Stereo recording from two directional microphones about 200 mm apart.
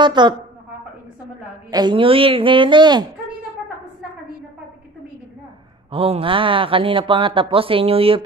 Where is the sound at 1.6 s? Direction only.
20° right (ahead or behind).